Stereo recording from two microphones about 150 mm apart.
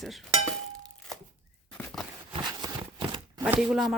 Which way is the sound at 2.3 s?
30° right (ahead or behind).